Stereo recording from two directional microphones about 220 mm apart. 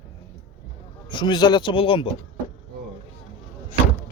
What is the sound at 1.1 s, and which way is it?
Speech, 20° left (ahead or behind).